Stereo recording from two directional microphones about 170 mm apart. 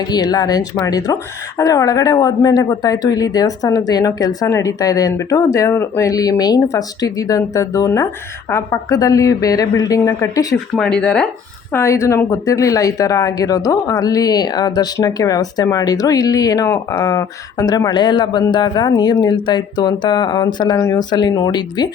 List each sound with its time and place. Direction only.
0.0 s a woman's voice: 25° left (ahead or behind)
10.8 s speech: 5° left (ahead or behind)
11.7 s a woman's voice: 20° left (ahead or behind)